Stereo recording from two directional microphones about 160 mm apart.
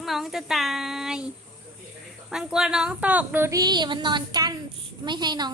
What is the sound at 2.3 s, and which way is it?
Speech, 5° right (ahead or behind).